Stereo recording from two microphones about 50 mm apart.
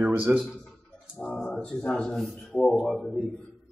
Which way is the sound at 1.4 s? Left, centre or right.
Centre.